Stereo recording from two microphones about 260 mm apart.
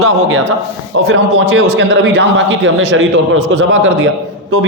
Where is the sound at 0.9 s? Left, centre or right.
Right.